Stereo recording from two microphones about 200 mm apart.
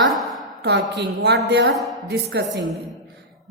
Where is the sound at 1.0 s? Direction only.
55° right (ahead or behind).